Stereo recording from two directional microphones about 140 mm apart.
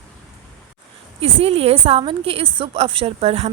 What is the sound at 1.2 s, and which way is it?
A woman's voice, 45° right (ahead or behind).